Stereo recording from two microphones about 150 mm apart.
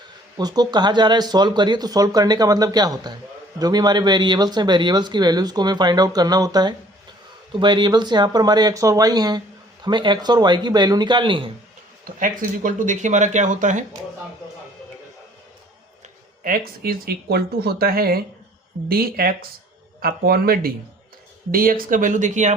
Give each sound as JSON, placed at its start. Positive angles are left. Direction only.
{"t": 0.3, "sound": "speech", "side_deg": -25}
{"t": 12.0, "sound": "speech", "side_deg": -65}
{"t": 16.4, "sound": "speech", "side_deg": -75}